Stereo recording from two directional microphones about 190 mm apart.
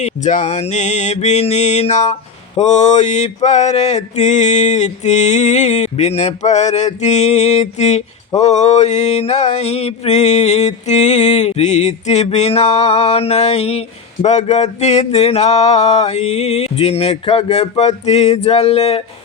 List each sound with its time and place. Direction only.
0.0 s mantra: 40° left (ahead or behind)